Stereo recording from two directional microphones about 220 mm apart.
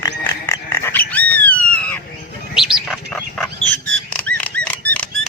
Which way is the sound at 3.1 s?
5° left (ahead or behind).